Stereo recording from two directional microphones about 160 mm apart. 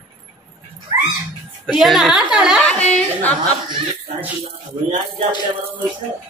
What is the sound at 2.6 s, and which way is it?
Speech, 10° left (ahead or behind).